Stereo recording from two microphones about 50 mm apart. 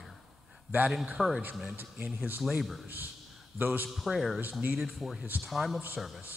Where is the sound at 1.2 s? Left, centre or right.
Centre.